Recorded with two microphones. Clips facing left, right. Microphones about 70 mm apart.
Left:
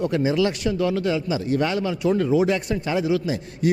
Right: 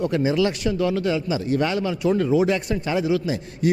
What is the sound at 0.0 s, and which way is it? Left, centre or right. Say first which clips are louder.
A man's voice: even; centre.